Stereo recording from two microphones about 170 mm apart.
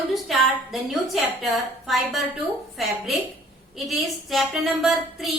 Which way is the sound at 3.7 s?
Centre (ahead or behind).